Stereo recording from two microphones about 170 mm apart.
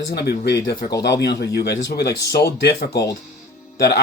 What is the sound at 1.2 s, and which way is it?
Speech, 75° left (ahead or behind).